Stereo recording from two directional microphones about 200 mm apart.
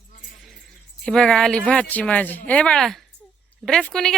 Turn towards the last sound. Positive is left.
turn(degrees=5)  # may be behind; listen again after turning